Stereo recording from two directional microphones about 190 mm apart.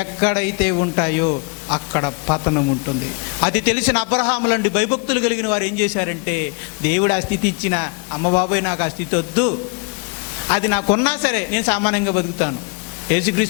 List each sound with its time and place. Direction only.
0.0 s a man's voice: 15° left (ahead or behind)
3.4 s a man's voice: 15° left (ahead or behind)
10.5 s a man's voice: 20° left (ahead or behind)